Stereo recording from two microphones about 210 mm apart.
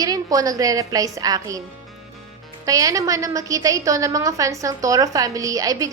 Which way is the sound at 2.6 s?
15° right (ahead or behind).